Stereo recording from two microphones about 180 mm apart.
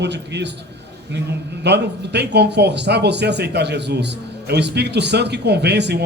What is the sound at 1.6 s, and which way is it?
A man's voice, 70° right (ahead or behind).